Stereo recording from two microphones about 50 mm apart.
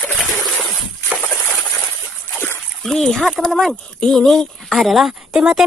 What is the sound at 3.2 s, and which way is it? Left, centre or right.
Speech, centre.